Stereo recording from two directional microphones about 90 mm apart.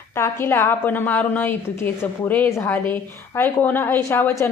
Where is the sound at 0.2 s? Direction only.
30° left (ahead or behind).